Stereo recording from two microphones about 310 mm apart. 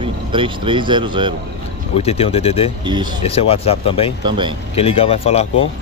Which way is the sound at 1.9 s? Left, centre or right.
Centre.